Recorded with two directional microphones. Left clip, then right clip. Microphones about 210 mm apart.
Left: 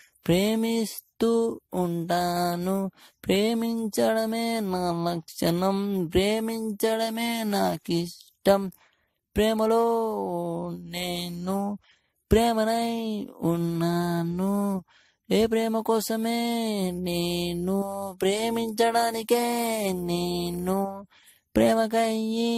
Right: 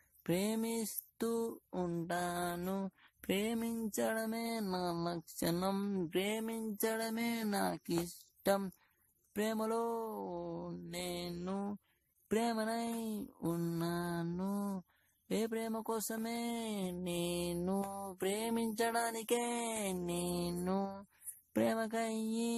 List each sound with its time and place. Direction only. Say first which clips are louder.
0.2 s mantra: left 12 dB; 35° left (ahead or behind)